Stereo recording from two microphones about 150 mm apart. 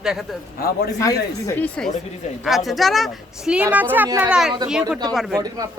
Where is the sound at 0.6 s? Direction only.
90° left.